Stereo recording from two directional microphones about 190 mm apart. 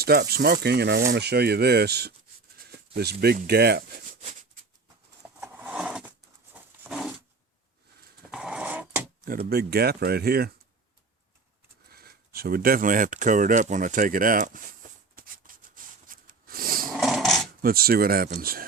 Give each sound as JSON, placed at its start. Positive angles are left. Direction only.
{"t": 0.0, "sound": "speech", "side_deg": -55}
{"t": 5.5, "sound": "zipper", "side_deg": -10}
{"t": 6.8, "sound": "a sound", "side_deg": -5}
{"t": 8.3, "sound": "dog", "side_deg": -5}
{"t": 9.2, "sound": "speech", "side_deg": -50}
{"t": 11.9, "sound": "speech", "side_deg": -55}
{"t": 15.1, "sound": "a sound", "side_deg": -45}
{"t": 16.9, "sound": "dog", "side_deg": 0}
{"t": 17.6, "sound": "speech", "side_deg": -50}